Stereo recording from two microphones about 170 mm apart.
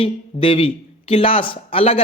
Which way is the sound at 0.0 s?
30° left (ahead or behind).